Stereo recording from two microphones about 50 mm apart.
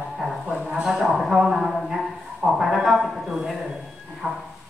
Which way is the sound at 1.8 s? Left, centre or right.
Centre.